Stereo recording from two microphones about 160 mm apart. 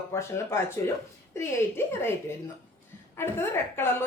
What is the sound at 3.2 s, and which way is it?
Speech, 15° left (ahead or behind).